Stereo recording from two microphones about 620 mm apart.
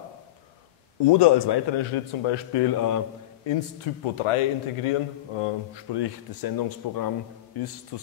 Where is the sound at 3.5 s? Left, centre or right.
Left.